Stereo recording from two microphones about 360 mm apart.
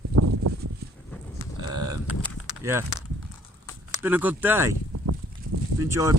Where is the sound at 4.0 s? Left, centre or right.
Centre.